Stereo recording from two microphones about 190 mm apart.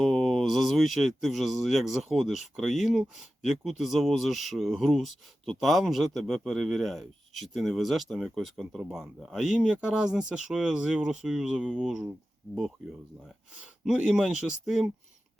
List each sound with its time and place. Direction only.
0.0 s speech: centre (ahead or behind)
13.8 s speech: 5° right (ahead or behind)